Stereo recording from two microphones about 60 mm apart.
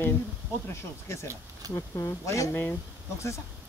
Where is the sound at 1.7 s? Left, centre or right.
Left.